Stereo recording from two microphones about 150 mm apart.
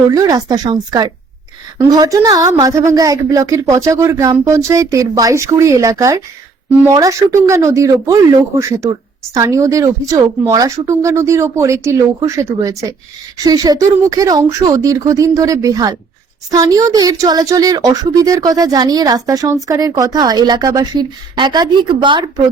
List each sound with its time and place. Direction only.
0.1 s a woman's voice: 25° right (ahead or behind)